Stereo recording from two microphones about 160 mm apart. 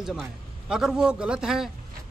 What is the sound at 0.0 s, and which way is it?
A man's voice, 5° right (ahead or behind).